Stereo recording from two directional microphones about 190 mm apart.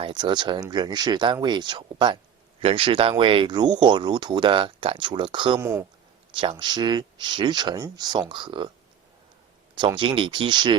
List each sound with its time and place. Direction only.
0.0 s speech: 25° right (ahead or behind)
5.5 s speech: 15° right (ahead or behind)
6.3 s speech: 25° right (ahead or behind)
9.7 s speech: 25° right (ahead or behind)